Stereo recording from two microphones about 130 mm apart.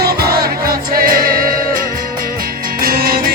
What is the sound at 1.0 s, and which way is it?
Music, 90° right.